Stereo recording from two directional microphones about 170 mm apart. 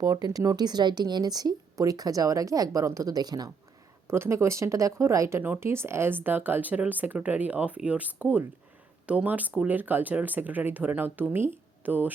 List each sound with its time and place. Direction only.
0.0 s speech: 20° right (ahead or behind)